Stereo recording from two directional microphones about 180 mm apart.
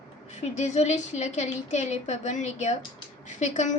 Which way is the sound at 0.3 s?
40° left (ahead or behind).